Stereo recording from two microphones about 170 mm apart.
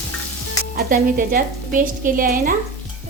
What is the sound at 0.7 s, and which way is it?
A woman's voice, 55° right (ahead or behind).